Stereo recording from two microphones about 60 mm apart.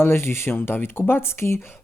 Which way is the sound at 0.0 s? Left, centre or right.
Left.